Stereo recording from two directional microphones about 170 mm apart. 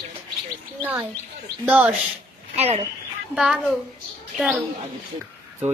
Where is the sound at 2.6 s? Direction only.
35° right (ahead or behind).